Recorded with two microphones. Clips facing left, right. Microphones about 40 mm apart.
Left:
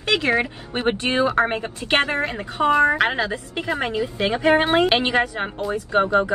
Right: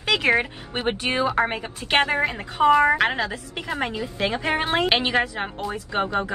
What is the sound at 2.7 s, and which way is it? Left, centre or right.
Speech, centre.